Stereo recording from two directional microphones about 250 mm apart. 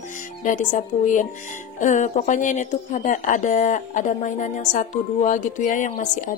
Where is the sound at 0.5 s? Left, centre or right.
Left.